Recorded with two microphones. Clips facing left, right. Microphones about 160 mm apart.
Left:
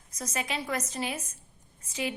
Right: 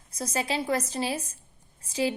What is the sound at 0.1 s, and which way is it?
A woman's voice, 30° right (ahead or behind).